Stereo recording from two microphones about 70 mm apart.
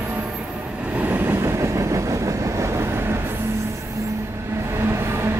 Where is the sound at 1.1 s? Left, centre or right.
Right.